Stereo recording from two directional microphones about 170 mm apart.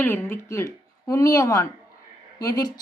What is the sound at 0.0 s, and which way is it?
Speech, 15° left (ahead or behind).